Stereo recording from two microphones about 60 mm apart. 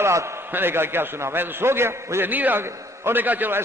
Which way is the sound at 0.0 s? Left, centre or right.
Right.